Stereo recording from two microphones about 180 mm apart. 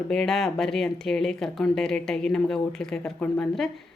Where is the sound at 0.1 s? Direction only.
5° left (ahead or behind).